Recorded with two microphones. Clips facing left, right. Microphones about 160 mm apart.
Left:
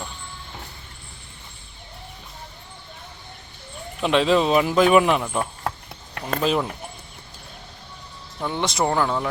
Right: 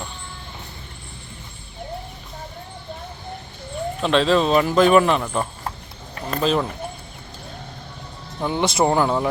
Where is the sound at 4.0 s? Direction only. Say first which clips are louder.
Right 1 dB; 10° left (ahead or behind).